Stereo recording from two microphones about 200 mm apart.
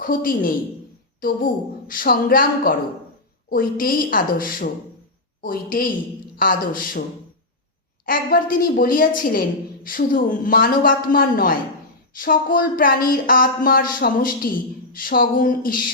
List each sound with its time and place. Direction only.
0.0 s speech: 45° left (ahead or behind)
8.0 s speech: 45° left (ahead or behind)